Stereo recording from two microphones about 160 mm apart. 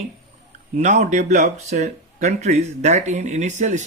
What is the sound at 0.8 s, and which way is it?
Speech, 45° right (ahead or behind).